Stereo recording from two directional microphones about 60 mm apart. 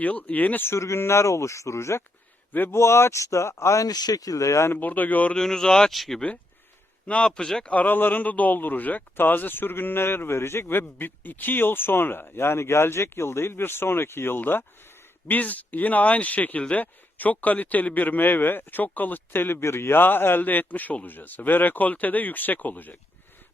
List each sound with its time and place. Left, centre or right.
0.0 s speech: left
0.6 s speech: left
2.5 s speech: left
2.7 s speech: left
4.7 s speech: left
5.3 s speech: centre
7.1 s a man's voice: centre